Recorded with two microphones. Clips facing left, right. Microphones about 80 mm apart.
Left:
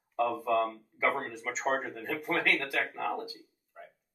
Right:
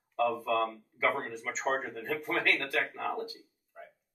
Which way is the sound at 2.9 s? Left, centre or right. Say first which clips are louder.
Left 1 dB; centre.